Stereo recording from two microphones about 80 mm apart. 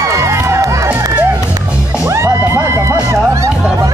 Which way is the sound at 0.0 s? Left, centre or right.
Right.